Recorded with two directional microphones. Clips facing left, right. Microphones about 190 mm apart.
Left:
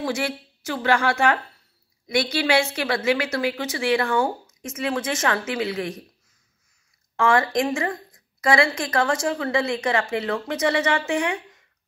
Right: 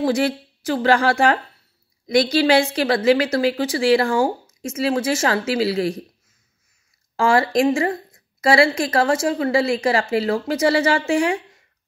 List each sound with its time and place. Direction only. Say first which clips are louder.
0.0 s a woman's voice: right 7 dB; 35° right (ahead or behind)
7.2 s a woman's voice: right 3 dB; 30° right (ahead or behind)